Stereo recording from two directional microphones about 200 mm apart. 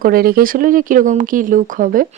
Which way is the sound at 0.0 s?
45° right (ahead or behind).